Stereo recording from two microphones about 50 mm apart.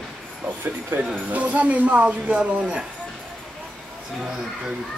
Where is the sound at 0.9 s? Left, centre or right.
Right.